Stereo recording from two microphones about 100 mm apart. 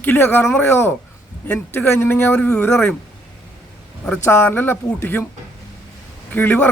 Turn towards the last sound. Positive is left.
turn(degrees=20)  # may be behind; listen again after turning